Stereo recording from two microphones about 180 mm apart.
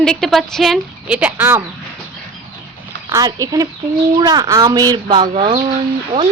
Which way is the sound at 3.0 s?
20° right (ahead or behind).